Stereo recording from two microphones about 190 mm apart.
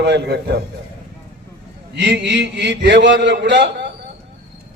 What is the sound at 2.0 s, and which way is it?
A man's voice, 65° right (ahead or behind).